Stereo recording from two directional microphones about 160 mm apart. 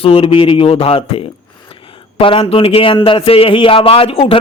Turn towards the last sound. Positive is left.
turn(degrees=35)  # may be behind; listen again after turning